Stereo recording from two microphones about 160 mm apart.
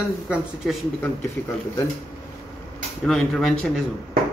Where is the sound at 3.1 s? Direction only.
Centre (ahead or behind).